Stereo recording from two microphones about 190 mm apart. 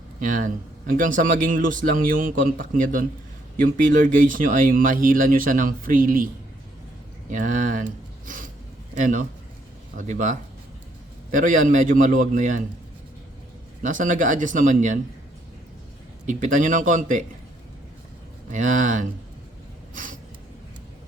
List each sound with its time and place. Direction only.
0.2 s speech: 45° right (ahead or behind)
7.3 s speech: 40° right (ahead or behind)
9.0 s speech: 45° right (ahead or behind)
13.8 s speech: 45° right (ahead or behind)
16.2 s speech: 40° right (ahead or behind)
18.5 s speech: 40° right (ahead or behind)
19.9 s a sound: 45° right (ahead or behind)